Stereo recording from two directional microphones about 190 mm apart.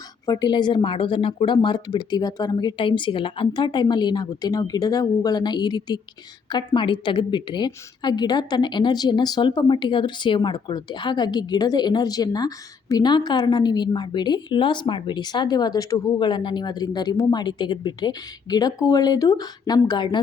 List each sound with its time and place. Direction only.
0.3 s a woman's voice: 20° left (ahead or behind)